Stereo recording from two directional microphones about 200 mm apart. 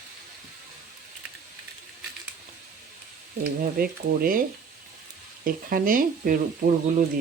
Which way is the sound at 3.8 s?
45° right (ahead or behind).